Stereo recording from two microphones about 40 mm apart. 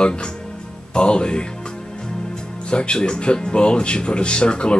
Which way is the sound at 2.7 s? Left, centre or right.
Left.